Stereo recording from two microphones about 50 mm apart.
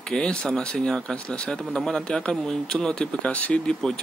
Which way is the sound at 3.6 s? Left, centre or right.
Centre.